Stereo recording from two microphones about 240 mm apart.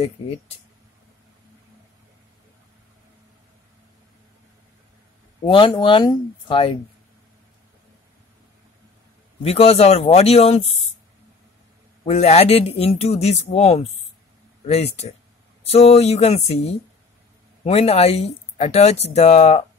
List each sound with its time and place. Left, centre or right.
5.5 s speech: left
9.4 s speech: left
12.0 s speech: left
17.6 s speech: left